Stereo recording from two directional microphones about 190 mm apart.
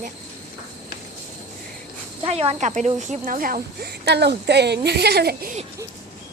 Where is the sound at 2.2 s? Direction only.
30° right (ahead or behind); by 5.5 s 55° right (ahead or behind).